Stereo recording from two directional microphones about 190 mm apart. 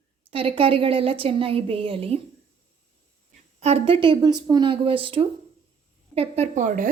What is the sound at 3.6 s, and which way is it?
Speech, 30° right (ahead or behind).